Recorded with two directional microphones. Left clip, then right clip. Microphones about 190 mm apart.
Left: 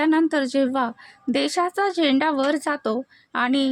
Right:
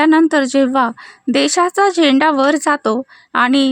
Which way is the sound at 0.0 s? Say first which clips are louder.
Right 8 dB; 35° right (ahead or behind).